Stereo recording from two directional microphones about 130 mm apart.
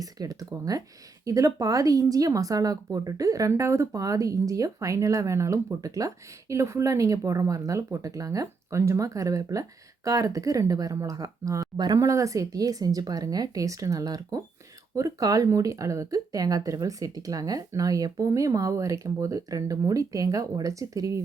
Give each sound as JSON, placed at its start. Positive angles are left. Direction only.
{"t": 0.0, "sound": "speech", "side_deg": -30}